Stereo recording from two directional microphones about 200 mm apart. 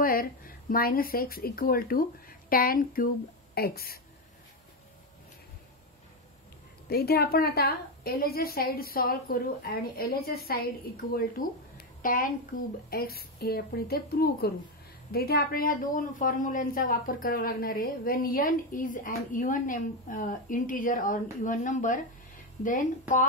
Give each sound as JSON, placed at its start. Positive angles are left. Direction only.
{"t": 0.0, "sound": "a woman's voice", "side_deg": 45}
{"t": 6.9, "sound": "a woman's voice", "side_deg": 50}